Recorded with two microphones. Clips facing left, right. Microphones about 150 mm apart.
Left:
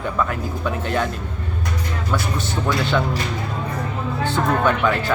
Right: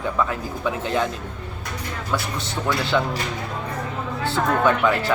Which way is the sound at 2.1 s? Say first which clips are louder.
Left 2 dB; centre (ahead or behind).